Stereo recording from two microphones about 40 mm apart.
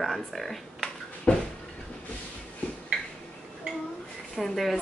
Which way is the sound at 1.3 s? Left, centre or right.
Left.